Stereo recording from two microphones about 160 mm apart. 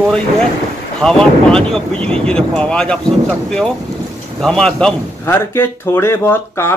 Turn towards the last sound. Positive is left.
turn(degrees=15)  # may be behind; listen again after turning